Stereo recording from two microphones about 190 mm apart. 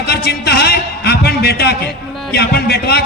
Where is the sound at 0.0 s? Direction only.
60° left (ahead or behind).